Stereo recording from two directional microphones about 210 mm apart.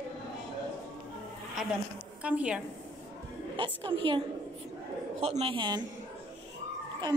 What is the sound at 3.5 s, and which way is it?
Speech, 25° right (ahead or behind).